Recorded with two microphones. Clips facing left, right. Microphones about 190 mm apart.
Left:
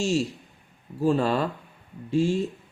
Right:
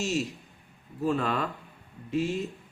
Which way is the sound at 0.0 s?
30° left (ahead or behind).